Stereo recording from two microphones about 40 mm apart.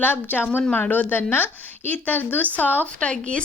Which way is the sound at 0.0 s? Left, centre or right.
Left.